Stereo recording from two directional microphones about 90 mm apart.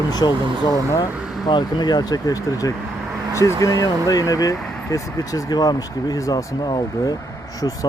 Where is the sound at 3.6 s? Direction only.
40° left (ahead or behind).